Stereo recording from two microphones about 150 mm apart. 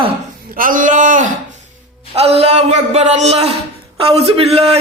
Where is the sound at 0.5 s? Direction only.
65° right (ahead or behind).